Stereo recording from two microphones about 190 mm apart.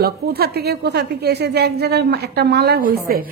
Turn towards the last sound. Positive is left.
turn(degrees=-50)  # may be behind; listen again after turning